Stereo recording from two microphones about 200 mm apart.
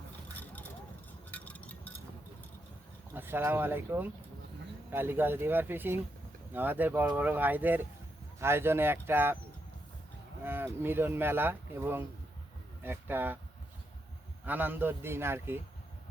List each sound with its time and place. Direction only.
1.3 s a sound: 5° left (ahead or behind)
3.2 s speech: 10° right (ahead or behind)
10.4 s speech: 10° right (ahead or behind)
14.4 s speech: 10° right (ahead or behind)